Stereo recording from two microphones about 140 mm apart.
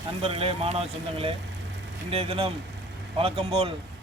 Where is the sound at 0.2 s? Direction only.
45° right (ahead or behind).